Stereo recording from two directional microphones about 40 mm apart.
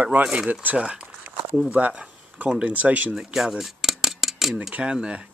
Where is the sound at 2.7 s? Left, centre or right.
Right.